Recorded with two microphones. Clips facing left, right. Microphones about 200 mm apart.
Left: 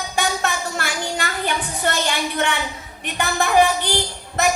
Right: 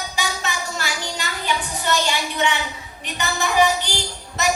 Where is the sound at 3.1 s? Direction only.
55° left (ahead or behind).